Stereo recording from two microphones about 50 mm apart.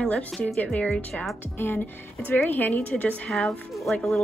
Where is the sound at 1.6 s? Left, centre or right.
Left.